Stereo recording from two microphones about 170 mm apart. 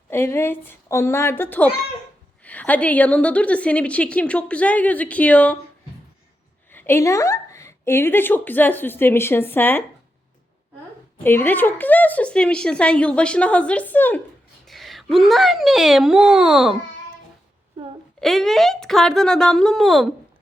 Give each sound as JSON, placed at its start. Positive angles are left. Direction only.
{"t": 0.1, "sound": "a woman's voice", "side_deg": 15}
{"t": 6.7, "sound": "speech", "side_deg": 15}
{"t": 11.2, "sound": "a woman's voice", "side_deg": 10}
{"t": 18.2, "sound": "a woman's voice", "side_deg": 0}